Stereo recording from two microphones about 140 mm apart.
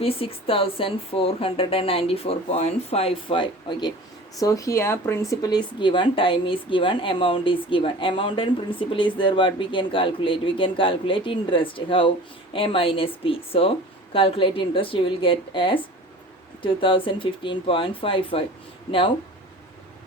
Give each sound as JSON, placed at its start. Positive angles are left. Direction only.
{"t": 0.0, "sound": "a woman's voice", "side_deg": 40}